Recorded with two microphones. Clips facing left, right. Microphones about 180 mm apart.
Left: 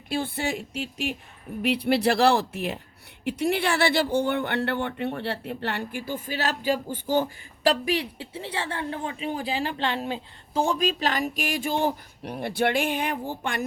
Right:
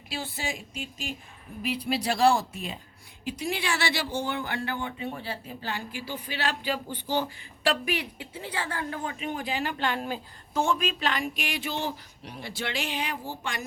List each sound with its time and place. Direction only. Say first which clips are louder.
0.1 s speech: left 7 dB; 55° left (ahead or behind)